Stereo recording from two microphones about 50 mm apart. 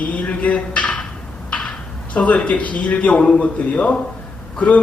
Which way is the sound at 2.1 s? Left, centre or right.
Left.